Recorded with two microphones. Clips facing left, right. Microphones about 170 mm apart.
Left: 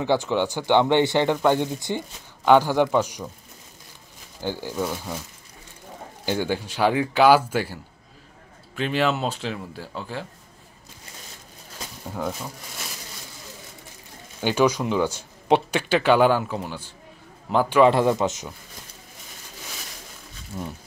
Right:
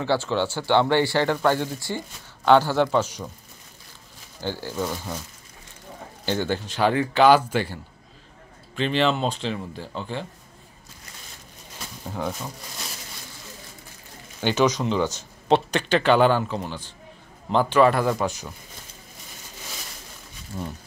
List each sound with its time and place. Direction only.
0.0 s speech: 15° left (ahead or behind)
4.4 s speech: 15° left (ahead or behind)
6.2 s speech: 10° left (ahead or behind)
12.0 s speech: centre (ahead or behind)
14.4 s speech: 10° left (ahead or behind)
17.8 s speech: 20° left (ahead or behind)
20.5 s speech: 10° left (ahead or behind)